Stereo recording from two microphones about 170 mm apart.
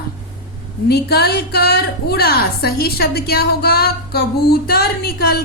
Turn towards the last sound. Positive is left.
turn(degrees=65)  # may be behind; listen again after turning